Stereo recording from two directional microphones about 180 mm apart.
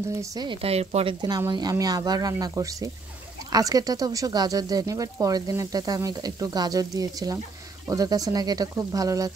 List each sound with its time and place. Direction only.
0.1 s speech: 20° right (ahead or behind); by 1.1 s 35° right (ahead or behind)
1.2 s speech: 20° right (ahead or behind)